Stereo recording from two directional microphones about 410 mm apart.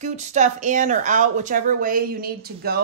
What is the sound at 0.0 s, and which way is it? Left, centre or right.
A woman's voice, centre.